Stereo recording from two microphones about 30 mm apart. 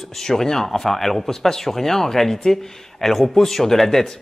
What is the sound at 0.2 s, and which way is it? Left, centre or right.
A man's voice, centre.